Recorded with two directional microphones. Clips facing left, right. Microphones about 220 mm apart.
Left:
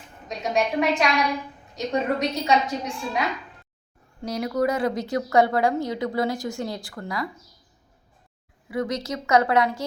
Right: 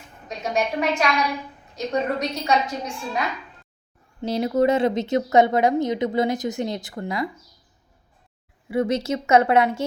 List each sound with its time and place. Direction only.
0.3 s a woman's voice: centre (ahead or behind)
4.2 s speech: 25° right (ahead or behind)
8.7 s speech: 25° right (ahead or behind)